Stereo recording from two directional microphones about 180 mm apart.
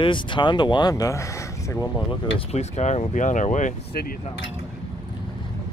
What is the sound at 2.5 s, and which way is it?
Speech, 40° left (ahead or behind).